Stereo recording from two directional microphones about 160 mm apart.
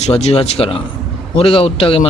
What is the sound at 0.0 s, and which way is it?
Speech, 40° left (ahead or behind).